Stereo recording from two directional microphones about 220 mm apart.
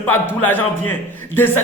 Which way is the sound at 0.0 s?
10° left (ahead or behind).